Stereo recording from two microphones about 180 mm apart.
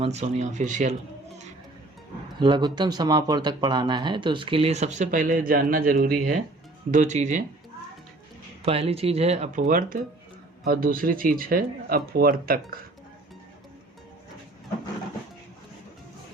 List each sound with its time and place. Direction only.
0.0 s speech: 35° right (ahead or behind)
2.4 s speech: 25° right (ahead or behind); by 6.4 s 55° right (ahead or behind)
6.9 s speech: 40° right (ahead or behind)
8.6 s speech: 35° right (ahead or behind); by 12.5 s 55° right (ahead or behind)